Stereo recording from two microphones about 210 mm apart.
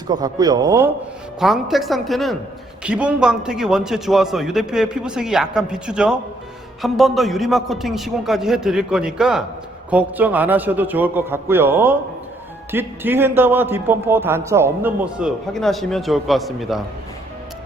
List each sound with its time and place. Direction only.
0.1 s a man's voice: 20° right (ahead or behind)
1.4 s a man's voice: centre (ahead or behind)
15.5 s a man's voice: centre (ahead or behind)